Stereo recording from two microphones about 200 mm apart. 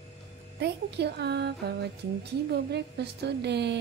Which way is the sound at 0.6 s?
55° right (ahead or behind).